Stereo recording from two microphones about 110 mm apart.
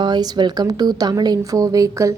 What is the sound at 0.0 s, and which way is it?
A woman's voice, 40° right (ahead or behind).